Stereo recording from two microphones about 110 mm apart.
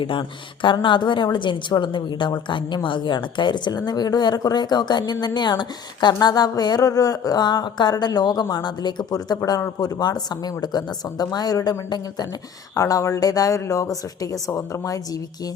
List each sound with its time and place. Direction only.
0.0 s a woman's voice: 50° left (ahead or behind); by 14.9 s 30° left (ahead or behind)